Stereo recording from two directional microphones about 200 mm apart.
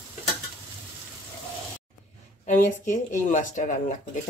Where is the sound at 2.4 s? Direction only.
40° left (ahead or behind).